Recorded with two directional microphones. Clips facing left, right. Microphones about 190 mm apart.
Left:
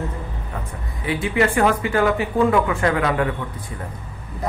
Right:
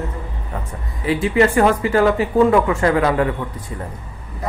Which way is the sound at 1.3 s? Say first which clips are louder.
Right 3 dB; 30° right (ahead or behind).